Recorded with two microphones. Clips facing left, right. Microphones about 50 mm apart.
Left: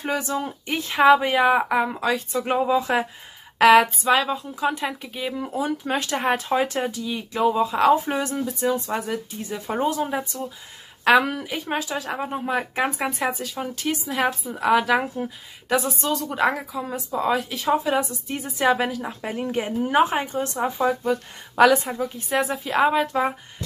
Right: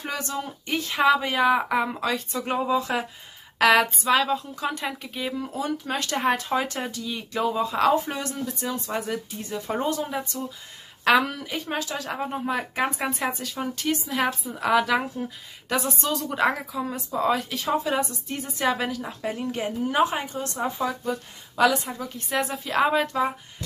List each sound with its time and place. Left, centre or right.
0.0 s speech: centre
1.7 s a woman's voice: centre
2.9 s speech: left
4.0 s a woman's voice: centre
19.3 s speech: left
21.0 s speech: left
22.1 s speech: centre